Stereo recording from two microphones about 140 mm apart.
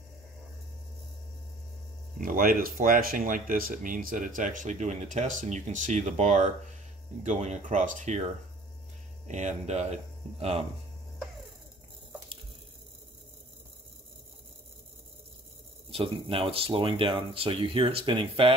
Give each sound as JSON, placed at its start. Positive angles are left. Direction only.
{"t": 2.1, "sound": "speech", "side_deg": -80}
{"t": 9.3, "sound": "speech", "side_deg": -55}
{"t": 15.9, "sound": "speech", "side_deg": -40}